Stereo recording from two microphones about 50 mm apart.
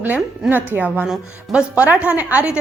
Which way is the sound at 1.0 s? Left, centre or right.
Centre.